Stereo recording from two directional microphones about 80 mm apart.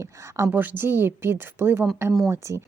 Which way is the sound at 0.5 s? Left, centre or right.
Right.